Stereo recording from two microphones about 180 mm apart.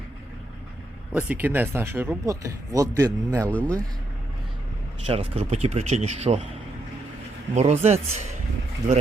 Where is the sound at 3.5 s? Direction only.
10° left (ahead or behind).